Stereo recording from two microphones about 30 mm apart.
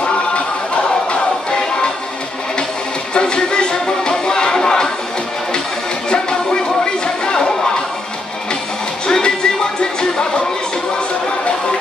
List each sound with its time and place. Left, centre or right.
1.5 s music: left
3.2 s music: left
6.0 s music: left
9.0 s music: left